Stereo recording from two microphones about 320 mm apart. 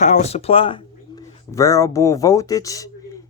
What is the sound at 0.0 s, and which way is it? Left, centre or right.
Speech, left.